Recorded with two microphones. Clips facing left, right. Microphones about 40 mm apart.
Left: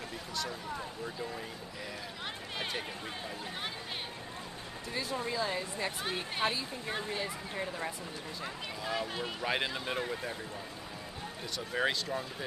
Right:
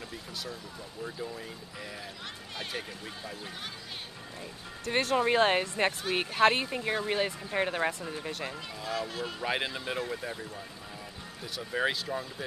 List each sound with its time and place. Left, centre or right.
4.8 s speech: right
8.8 s speech: centre
9.4 s speech: centre
11.5 s speech: centre